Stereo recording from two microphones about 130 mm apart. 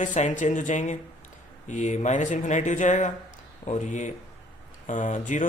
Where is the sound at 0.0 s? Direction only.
70° left (ahead or behind).